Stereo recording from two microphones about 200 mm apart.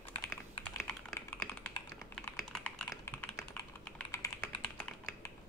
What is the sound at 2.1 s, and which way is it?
Typing, 5° left (ahead or behind).